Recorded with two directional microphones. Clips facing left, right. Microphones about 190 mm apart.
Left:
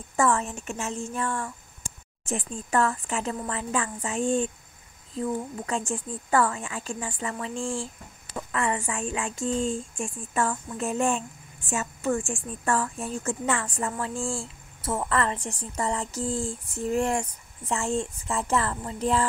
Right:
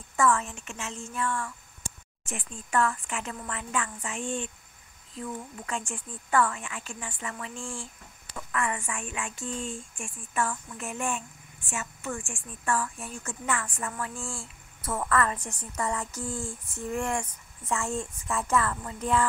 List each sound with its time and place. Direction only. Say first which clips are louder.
0.1 s speech: left 1 dB; 30° left (ahead or behind)
13.2 s a woman's voice: left 4 dB; 25° left (ahead or behind)